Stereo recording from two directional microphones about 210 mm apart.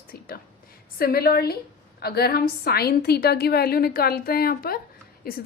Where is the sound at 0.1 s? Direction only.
45° left (ahead or behind).